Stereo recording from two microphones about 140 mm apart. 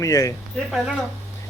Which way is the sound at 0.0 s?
20° left (ahead or behind).